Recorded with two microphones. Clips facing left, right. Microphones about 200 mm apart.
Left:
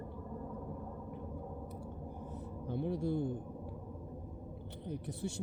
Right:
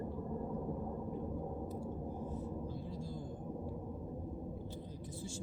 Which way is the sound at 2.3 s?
65° left (ahead or behind).